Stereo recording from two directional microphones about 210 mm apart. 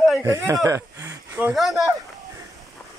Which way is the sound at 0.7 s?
15° right (ahead or behind).